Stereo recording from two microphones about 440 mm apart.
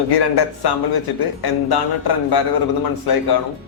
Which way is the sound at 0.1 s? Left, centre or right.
Left.